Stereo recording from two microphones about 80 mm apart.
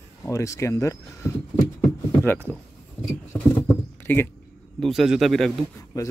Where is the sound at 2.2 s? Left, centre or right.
Left.